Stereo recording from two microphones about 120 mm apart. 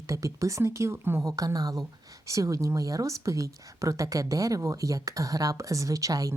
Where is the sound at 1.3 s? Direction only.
30° right (ahead or behind).